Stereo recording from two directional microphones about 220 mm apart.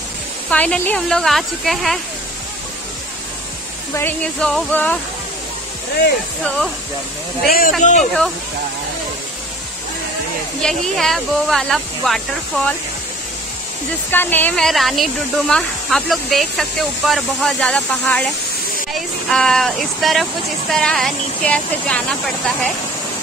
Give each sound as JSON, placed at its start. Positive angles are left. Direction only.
{"t": 0.5, "sound": "speech", "side_deg": 5}
{"t": 3.9, "sound": "speech", "side_deg": 10}
{"t": 6.4, "sound": "speech", "side_deg": 5}
{"t": 7.4, "sound": "speech", "side_deg": 40}
{"t": 10.6, "sound": "speech", "side_deg": 0}
{"t": 14.1, "sound": "speech", "side_deg": 10}